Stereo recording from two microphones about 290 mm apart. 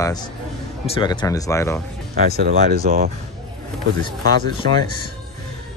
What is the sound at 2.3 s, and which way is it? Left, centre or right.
Speech, right.